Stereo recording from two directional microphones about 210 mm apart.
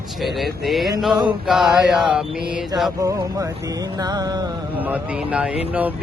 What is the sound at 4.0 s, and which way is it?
Music, 20° right (ahead or behind).